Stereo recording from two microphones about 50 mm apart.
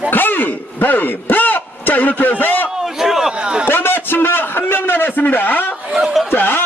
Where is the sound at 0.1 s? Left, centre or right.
Left.